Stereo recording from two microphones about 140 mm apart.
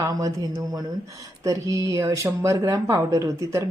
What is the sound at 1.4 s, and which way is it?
Speech, 25° right (ahead or behind).